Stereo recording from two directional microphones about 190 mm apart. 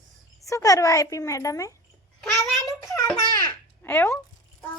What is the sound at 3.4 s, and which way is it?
Babbling, 10° left (ahead or behind).